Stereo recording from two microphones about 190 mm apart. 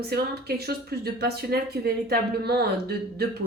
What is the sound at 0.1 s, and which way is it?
Speech, 55° right (ahead or behind).